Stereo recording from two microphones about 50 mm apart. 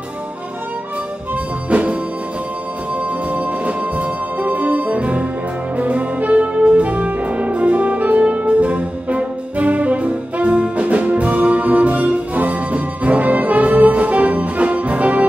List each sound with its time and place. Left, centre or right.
1.3 s music: right
3.3 s music: right